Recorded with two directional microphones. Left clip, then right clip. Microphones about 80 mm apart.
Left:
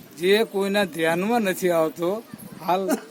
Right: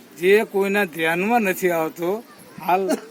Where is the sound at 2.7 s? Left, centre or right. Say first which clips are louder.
Right 3 dB; left.